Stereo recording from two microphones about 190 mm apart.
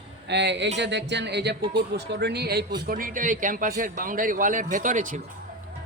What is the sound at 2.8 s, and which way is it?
A man's voice, 50° right (ahead or behind).